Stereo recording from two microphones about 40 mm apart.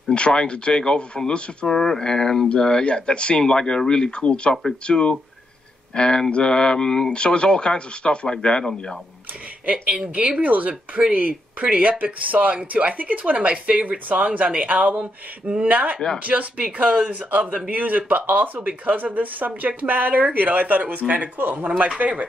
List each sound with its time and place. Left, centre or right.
0.1 s speech: left
1.7 s speech: centre
10.1 s speech: right
10.4 s speech: right
21.4 s speech: right
21.7 s speech: right